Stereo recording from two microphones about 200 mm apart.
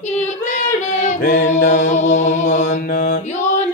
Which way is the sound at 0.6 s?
40° left (ahead or behind).